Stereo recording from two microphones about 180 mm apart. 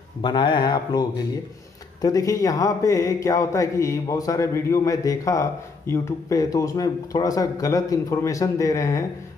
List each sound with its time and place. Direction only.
0.2 s a man's voice: 25° left (ahead or behind)